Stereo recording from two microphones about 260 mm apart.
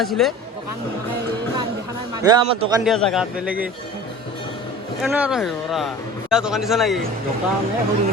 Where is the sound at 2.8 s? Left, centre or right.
Centre.